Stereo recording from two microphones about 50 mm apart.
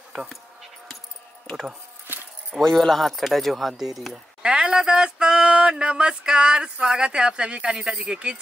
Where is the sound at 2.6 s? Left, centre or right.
Centre.